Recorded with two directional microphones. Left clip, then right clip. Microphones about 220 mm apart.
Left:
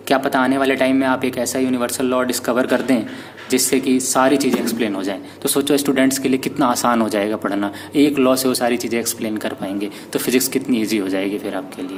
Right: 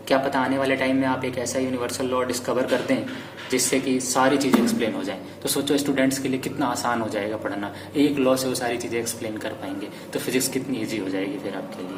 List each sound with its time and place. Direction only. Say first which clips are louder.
0.1 s speech: left 5 dB; 50° left (ahead or behind)